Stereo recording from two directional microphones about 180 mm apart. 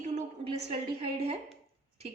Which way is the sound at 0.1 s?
35° right (ahead or behind).